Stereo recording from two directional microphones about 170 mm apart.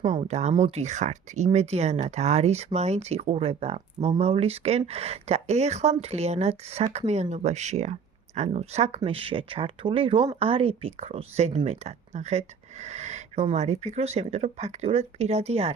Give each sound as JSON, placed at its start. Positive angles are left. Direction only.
{"t": 0.1, "sound": "speech", "side_deg": -40}